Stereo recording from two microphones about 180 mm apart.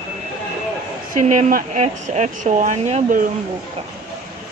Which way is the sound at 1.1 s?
45° right (ahead or behind).